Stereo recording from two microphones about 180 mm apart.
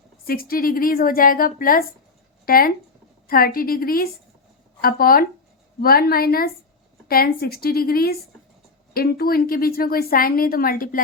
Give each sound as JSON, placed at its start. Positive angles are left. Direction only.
{"t": 0.3, "sound": "a woman's voice", "side_deg": 55}